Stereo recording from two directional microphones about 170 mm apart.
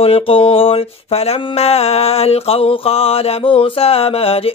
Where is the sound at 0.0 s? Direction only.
35° left (ahead or behind).